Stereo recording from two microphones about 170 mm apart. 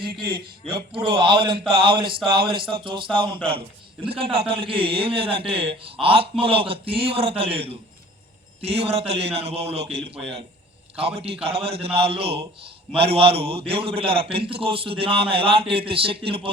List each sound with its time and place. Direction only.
0.0 s a man's voice: 30° right (ahead or behind)